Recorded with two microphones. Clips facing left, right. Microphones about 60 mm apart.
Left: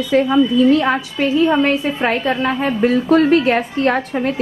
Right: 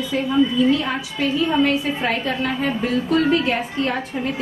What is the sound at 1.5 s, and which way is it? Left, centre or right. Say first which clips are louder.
A woman's voice: left 3 dB; left.